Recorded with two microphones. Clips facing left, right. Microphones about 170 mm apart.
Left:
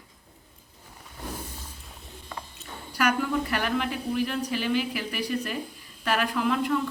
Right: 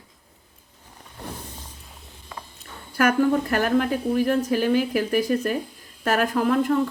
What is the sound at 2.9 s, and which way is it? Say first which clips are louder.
A woman's voice: right 6 dB; 50° right (ahead or behind).